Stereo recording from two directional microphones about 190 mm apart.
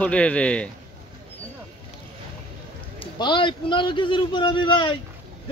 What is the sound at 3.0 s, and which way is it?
A man's voice, 25° left (ahead or behind).